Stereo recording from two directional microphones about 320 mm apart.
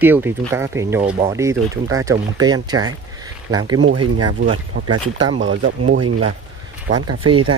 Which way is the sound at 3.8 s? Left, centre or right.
Right.